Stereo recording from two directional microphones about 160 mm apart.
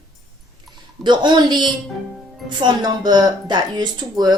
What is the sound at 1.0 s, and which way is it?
Speech, 30° right (ahead or behind).